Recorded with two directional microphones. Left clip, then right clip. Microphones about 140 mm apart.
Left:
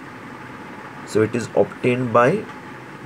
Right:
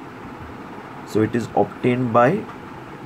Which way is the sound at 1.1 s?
5° left (ahead or behind).